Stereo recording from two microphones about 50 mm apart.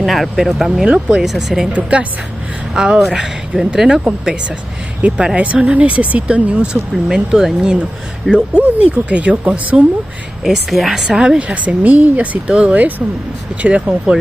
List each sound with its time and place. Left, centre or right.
0.0 s speech: centre
0.8 s speech: centre
1.3 s speech: centre
1.7 s speech: right
2.7 s speech: centre
5.0 s speech: centre
8.3 s speech: right
10.4 s speech: centre
11.1 s speech: centre